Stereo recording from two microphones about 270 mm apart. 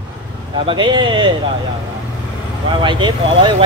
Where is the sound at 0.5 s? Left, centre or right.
Centre.